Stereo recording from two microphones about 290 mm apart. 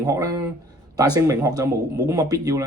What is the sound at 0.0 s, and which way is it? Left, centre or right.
Speech, centre.